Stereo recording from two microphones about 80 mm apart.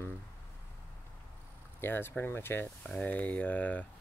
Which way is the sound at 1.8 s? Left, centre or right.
Left.